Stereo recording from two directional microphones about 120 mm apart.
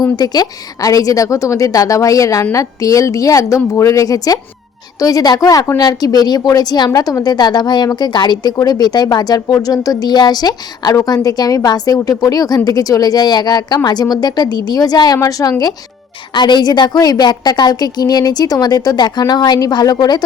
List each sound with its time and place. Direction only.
0.0 s a woman's voice: 30° left (ahead or behind)